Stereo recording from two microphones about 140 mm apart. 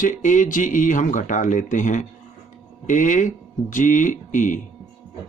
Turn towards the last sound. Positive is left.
turn(degrees=65)  # may be behind; listen again after turning